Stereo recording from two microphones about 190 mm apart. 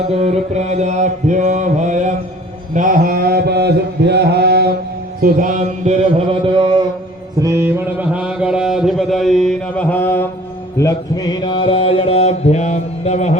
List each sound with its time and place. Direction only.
0.1 s mantra: 35° right (ahead or behind); by 4.8 s 60° right (ahead or behind)
5.2 s mantra: 45° right (ahead or behind); by 6.8 s 25° right (ahead or behind)
7.4 s mantra: 10° right (ahead or behind); by 13.4 s 35° left (ahead or behind)